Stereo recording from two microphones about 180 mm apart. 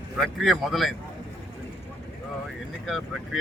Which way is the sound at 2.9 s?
Centre (ahead or behind).